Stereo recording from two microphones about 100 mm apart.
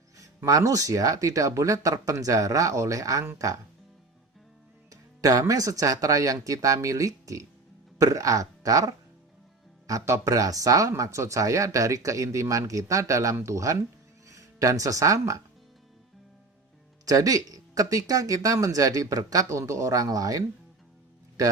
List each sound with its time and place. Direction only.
0.2 s speech: 35° right (ahead or behind)
4.9 s speech: 35° right (ahead or behind)
17.1 s speech: 35° right (ahead or behind)